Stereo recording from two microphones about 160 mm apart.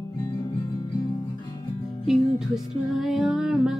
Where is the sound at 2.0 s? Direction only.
Centre (ahead or behind).